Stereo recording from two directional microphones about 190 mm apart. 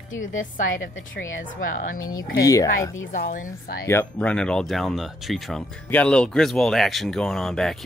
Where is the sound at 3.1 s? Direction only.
45° left (ahead or behind).